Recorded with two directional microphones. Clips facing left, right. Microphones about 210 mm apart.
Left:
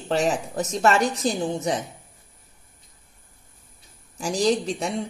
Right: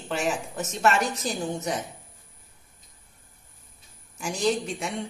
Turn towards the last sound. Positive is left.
turn(degrees=35)  # may be behind; listen again after turning